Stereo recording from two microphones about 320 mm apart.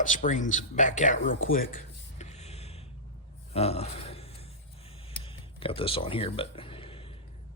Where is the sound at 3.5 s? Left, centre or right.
Centre.